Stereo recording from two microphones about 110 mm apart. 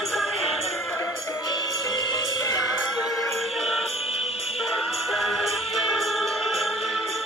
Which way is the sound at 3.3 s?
Centre (ahead or behind).